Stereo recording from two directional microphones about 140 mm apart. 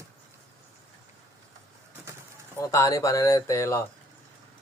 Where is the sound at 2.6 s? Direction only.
20° left (ahead or behind).